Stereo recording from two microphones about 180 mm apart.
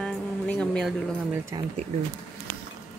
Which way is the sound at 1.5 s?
20° right (ahead or behind).